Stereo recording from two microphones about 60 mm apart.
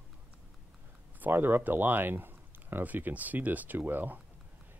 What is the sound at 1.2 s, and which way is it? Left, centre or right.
Speech, right.